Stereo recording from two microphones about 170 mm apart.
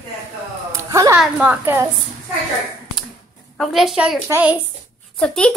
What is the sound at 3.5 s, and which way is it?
A woman's voice, centre (ahead or behind).